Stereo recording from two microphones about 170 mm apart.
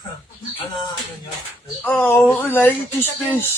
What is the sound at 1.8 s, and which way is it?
A man's voice, 10° left (ahead or behind).